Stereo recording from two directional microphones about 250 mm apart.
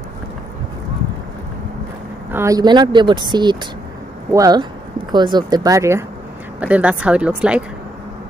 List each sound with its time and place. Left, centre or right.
2.3 s speech: centre